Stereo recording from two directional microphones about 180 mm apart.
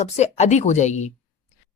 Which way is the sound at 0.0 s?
40° left (ahead or behind).